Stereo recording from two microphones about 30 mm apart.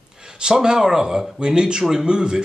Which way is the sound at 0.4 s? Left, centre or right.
Right.